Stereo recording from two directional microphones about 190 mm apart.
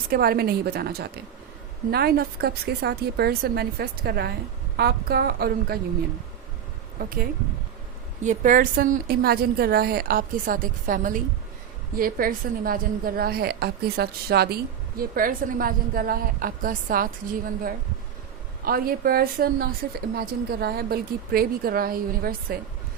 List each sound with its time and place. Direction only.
0.1 s a woman's voice: 55° right (ahead or behind)
7.0 s a woman's voice: 50° right (ahead or behind)
18.6 s a woman's voice: 50° right (ahead or behind)